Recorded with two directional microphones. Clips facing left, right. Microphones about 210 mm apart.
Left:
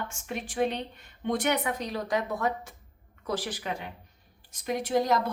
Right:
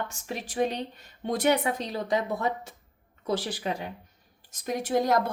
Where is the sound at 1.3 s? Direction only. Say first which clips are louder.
Right 4 dB; 35° right (ahead or behind).